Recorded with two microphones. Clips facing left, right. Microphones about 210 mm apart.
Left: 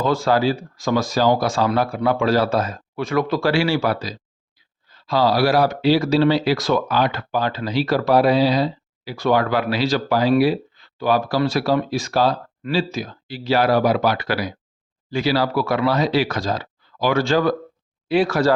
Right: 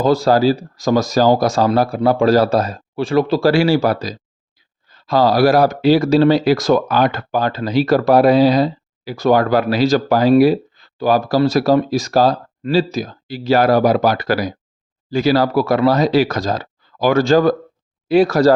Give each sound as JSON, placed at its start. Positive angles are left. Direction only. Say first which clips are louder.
{"t": 0.0, "sound": "speech", "louder": "right 5 dB", "side_deg": -40}